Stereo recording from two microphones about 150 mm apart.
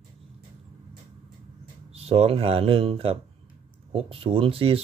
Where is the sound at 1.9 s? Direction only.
40° right (ahead or behind).